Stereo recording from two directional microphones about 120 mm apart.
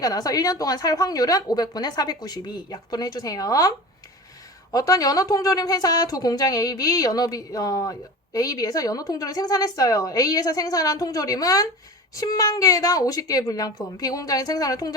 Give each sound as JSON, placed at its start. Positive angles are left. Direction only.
{"t": 0.0, "sound": "a woman's voice", "side_deg": 30}